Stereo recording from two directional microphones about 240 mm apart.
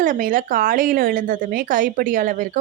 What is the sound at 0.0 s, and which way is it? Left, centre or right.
Speech, right.